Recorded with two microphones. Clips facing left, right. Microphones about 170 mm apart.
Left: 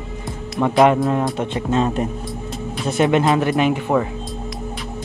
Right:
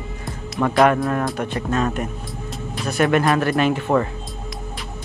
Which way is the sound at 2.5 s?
Centre (ahead or behind).